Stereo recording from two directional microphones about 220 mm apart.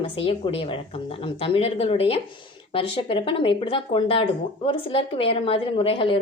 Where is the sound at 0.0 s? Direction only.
25° left (ahead or behind).